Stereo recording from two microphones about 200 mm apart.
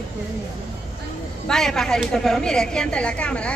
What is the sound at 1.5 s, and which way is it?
A woman's voice, centre (ahead or behind).